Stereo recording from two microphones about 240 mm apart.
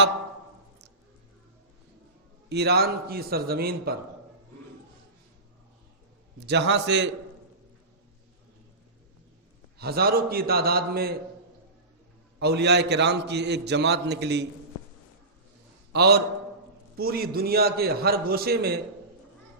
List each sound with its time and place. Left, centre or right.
2.5 s a man's voice: right
6.4 s a man's voice: right
9.7 s a man's voice: right
12.4 s a man's voice: right
15.9 s a man's voice: right